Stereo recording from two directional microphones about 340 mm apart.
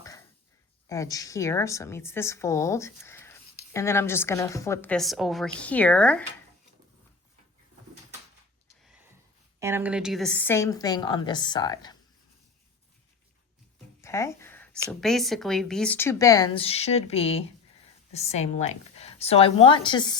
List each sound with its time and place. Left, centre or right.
0.9 s a woman's voice: centre
9.6 s a woman's voice: centre
14.0 s a woman's voice: centre